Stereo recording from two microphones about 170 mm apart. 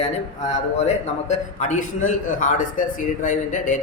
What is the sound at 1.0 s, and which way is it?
A man's voice, 45° left (ahead or behind).